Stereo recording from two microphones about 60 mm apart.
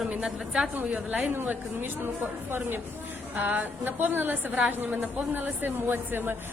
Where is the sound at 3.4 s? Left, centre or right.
Right.